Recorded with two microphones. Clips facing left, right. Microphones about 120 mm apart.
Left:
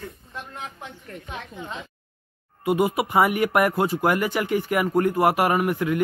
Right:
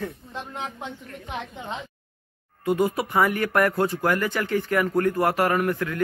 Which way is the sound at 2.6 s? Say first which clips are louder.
Left 1 dB; 15° left (ahead or behind).